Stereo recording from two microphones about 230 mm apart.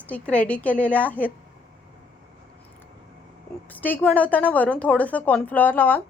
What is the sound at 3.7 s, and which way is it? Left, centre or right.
A woman's voice, centre.